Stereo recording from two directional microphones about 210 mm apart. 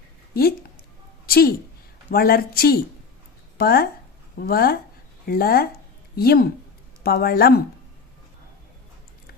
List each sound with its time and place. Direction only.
1.3 s a woman's voice: 45° left (ahead or behind)